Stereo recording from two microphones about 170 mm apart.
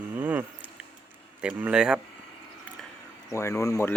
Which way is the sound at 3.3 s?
20° left (ahead or behind).